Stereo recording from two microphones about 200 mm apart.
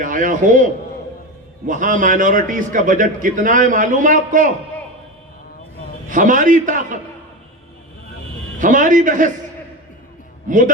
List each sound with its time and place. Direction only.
0.0 s a man's voice: 40° right (ahead or behind)
6.1 s a man's voice: 40° right (ahead or behind)
8.5 s a man's voice: 40° right (ahead or behind)